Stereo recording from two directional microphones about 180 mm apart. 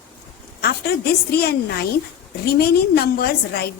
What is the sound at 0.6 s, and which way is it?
A woman's voice, 60° left (ahead or behind).